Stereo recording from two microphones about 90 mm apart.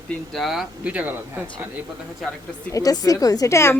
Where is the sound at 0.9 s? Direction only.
15° right (ahead or behind).